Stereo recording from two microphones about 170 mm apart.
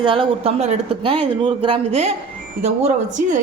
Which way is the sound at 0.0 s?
30° right (ahead or behind).